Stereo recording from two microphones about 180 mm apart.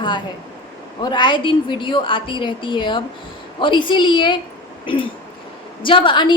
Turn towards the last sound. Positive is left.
turn(degrees=25)  # may be behind; listen again after turning